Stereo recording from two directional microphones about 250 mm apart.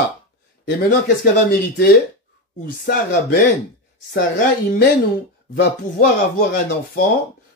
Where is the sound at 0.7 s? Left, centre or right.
Left.